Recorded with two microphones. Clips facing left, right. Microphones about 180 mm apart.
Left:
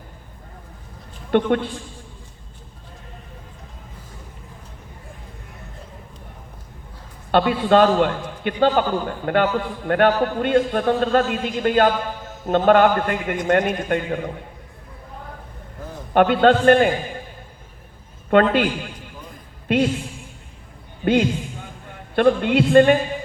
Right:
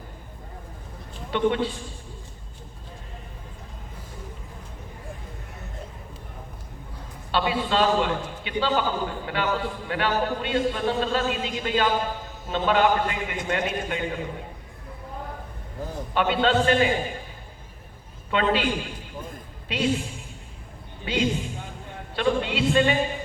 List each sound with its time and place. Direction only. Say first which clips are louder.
1.3 s a man's voice: left 4 dB; 55° left (ahead or behind)
7.3 s a man's voice: left 8 dB; 55° left (ahead or behind)
16.1 s a man's voice: left 7 dB; 50° left (ahead or behind)
18.3 s a man's voice: left 7 dB; 55° left (ahead or behind)
19.7 s a man's voice: left 11 dB; 50° left (ahead or behind)
21.0 s a man's voice: left 7 dB; 50° left (ahead or behind)